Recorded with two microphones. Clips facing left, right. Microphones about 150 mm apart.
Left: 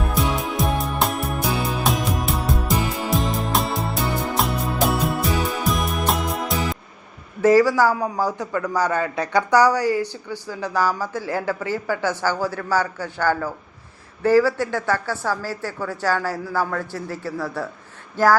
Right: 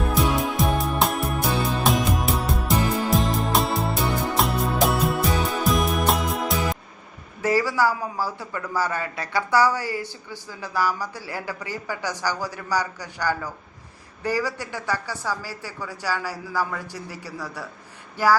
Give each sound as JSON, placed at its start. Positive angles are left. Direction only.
{"t": 0.1, "sound": "music", "side_deg": 0}
{"t": 7.4, "sound": "a sound", "side_deg": -10}
{"t": 7.9, "sound": "speech", "side_deg": 20}
{"t": 11.6, "sound": "speech", "side_deg": -15}